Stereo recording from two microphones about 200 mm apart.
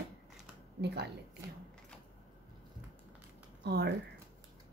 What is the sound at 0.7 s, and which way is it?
Speech, 55° right (ahead or behind).